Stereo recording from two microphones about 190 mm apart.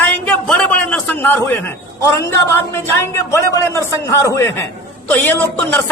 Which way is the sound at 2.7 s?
15° left (ahead or behind).